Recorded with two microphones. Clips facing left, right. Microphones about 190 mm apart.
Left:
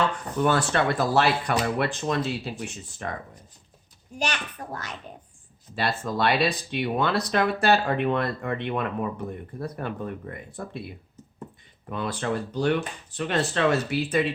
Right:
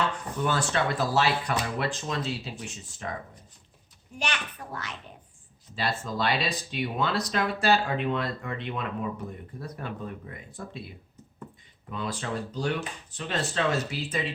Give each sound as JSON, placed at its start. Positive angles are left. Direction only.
{"t": 0.4, "sound": "speech", "side_deg": 55}
{"t": 4.2, "sound": "a child's voice", "side_deg": 40}
{"t": 5.7, "sound": "speech", "side_deg": 60}
{"t": 11.9, "sound": "speech", "side_deg": 55}